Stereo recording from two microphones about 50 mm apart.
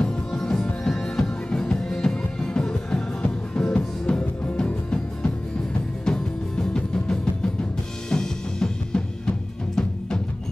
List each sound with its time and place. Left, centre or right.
0.1 s music: centre